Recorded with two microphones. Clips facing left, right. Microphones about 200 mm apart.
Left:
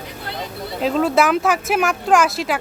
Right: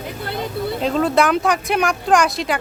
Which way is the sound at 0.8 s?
Centre (ahead or behind).